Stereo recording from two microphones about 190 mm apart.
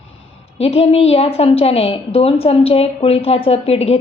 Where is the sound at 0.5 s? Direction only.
30° left (ahead or behind).